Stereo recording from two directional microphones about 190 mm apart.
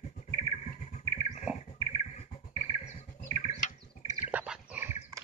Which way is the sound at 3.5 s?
35° left (ahead or behind).